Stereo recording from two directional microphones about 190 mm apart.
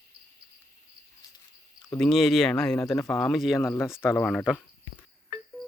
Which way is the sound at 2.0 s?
Centre (ahead or behind).